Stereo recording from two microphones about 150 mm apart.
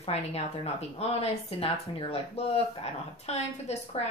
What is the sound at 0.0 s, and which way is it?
Speech, 45° left (ahead or behind).